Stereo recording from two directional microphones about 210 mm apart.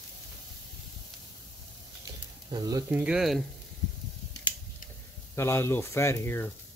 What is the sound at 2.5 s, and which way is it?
Speech, 20° right (ahead or behind).